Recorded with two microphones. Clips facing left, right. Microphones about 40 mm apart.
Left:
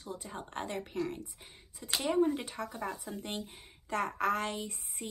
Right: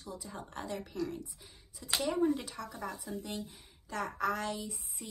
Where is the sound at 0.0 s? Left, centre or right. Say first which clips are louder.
Left 2 dB; left.